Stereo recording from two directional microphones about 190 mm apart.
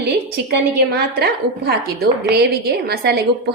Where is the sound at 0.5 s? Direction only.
55° right (ahead or behind).